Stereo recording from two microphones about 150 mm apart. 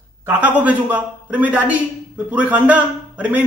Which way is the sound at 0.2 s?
15° right (ahead or behind).